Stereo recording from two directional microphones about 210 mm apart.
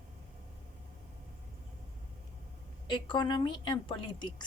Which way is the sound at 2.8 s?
20° left (ahead or behind).